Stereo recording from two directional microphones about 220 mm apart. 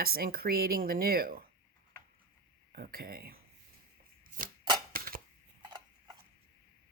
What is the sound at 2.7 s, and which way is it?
Speech, 45° right (ahead or behind).